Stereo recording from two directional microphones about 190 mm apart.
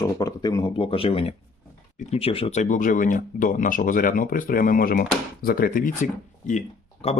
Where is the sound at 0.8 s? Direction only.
30° left (ahead or behind).